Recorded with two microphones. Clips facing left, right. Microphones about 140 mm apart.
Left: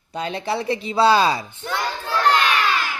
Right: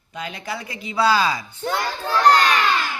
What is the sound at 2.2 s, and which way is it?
Crowd, 40° right (ahead or behind).